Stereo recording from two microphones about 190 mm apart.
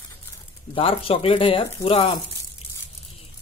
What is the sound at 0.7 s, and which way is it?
Speech, 30° left (ahead or behind).